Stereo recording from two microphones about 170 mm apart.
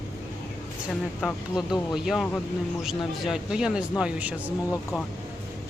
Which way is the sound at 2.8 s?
Centre (ahead or behind).